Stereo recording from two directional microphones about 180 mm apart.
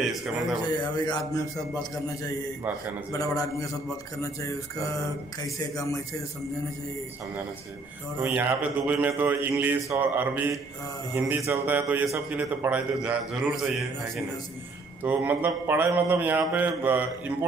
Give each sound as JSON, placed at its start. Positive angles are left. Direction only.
{"t": 0.7, "sound": "music", "side_deg": 25}
{"t": 3.1, "sound": "music", "side_deg": 20}
{"t": 4.2, "sound": "speech", "side_deg": 15}
{"t": 5.6, "sound": "music", "side_deg": 20}
{"t": 8.2, "sound": "a man's voice", "side_deg": -10}